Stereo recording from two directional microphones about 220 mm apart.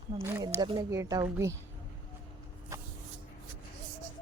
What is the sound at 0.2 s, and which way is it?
Speech, 10° right (ahead or behind).